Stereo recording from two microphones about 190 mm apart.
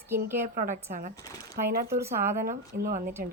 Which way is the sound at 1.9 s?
15° right (ahead or behind).